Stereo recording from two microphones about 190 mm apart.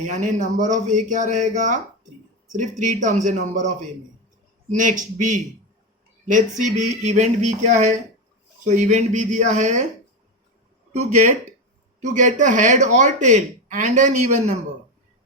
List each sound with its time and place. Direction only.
0.0 s speech: 40° right (ahead or behind)
4.7 s speech: 40° right (ahead or behind)
10.9 s speech: 40° right (ahead or behind)